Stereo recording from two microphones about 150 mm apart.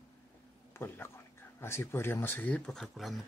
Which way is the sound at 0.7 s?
15° left (ahead or behind).